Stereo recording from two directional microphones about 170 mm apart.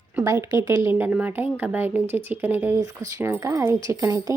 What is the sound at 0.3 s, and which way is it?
Speech, 15° right (ahead or behind).